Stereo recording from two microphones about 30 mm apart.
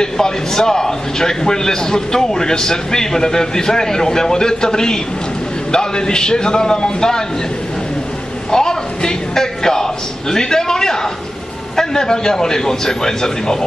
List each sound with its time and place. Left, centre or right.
0.0 s a man's voice: left
8.5 s a man's voice: left